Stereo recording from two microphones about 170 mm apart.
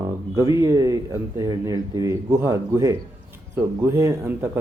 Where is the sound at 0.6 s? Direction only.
20° right (ahead or behind).